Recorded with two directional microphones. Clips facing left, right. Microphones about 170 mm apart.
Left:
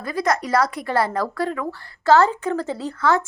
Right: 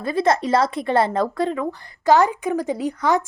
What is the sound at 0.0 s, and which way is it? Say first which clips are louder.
Speech: right 3 dB; 25° right (ahead or behind).